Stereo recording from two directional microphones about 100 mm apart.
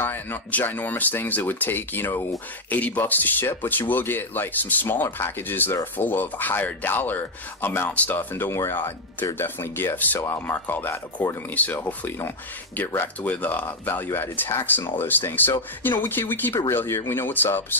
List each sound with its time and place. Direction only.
0.0 s speech: 20° left (ahead or behind)